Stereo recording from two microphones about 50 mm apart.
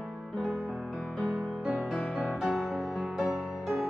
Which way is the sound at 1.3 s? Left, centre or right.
Right.